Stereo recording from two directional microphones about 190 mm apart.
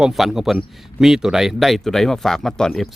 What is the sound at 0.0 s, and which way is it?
Speech, centre (ahead or behind).